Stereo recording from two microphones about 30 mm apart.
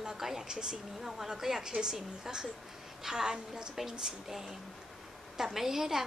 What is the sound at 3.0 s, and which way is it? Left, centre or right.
A woman's voice, centre.